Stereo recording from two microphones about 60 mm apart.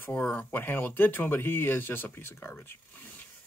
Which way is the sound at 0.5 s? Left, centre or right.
Left.